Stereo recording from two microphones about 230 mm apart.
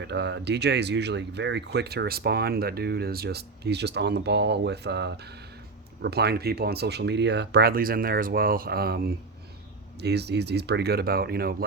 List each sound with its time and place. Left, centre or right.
0.0 s speech: right